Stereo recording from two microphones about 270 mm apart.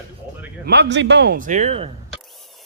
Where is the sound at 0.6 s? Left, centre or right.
Right.